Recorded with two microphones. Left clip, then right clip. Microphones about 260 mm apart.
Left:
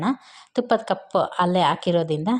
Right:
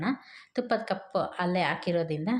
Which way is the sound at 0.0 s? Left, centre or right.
Left.